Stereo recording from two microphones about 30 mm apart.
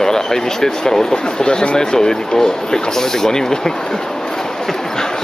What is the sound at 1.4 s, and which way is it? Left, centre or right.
Speech, left.